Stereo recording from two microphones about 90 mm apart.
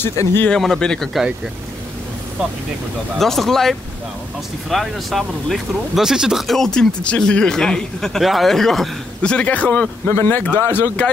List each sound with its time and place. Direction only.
0.0 s speech: 25° left (ahead or behind)
0.5 s speech: 5° left (ahead or behind)
3.2 s speech: 5° left (ahead or behind); by 10.9 s 25° left (ahead or behind)